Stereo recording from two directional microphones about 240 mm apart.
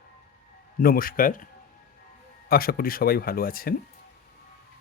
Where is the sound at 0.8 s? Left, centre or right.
Left.